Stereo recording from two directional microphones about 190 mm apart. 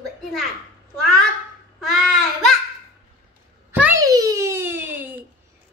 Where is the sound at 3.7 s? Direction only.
10° right (ahead or behind).